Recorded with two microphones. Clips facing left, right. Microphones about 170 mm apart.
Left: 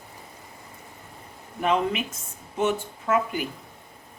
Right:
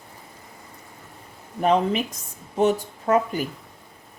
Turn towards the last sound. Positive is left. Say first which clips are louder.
# right 3 dB
turn(degrees=-40)  # may be behind; listen again after turning